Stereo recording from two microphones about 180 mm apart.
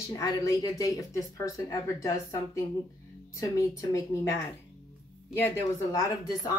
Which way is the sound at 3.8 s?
20° left (ahead or behind).